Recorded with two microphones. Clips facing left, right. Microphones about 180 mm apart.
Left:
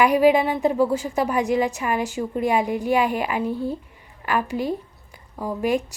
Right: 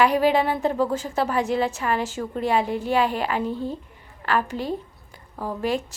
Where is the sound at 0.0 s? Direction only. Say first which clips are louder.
Left 3 dB; 10° left (ahead or behind).